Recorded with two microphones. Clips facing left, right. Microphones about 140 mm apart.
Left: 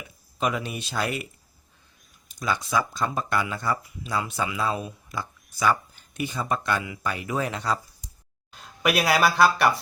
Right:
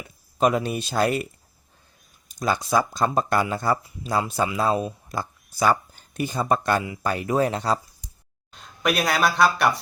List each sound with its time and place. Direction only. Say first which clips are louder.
0.3 s speech: right 6 dB; 40° right (ahead or behind)
2.4 s speech: right 4 dB; 40° right (ahead or behind)
8.5 s speech: even; 5° left (ahead or behind)